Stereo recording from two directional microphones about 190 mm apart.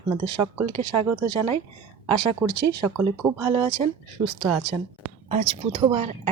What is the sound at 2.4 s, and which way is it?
Speech, 10° right (ahead or behind).